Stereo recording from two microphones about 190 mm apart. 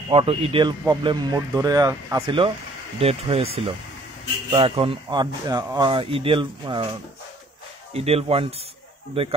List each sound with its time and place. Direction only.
0.1 s speech: 30° right (ahead or behind)
7.9 s speech: 30° right (ahead or behind)